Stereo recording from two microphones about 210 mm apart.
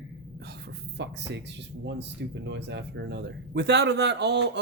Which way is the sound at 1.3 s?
55° right (ahead or behind).